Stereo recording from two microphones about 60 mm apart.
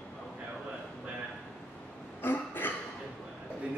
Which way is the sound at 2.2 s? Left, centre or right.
Left.